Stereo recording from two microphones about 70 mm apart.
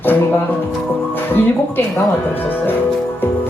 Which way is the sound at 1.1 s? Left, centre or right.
Left.